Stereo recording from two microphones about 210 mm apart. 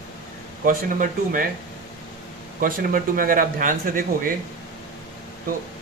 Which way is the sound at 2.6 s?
40° right (ahead or behind).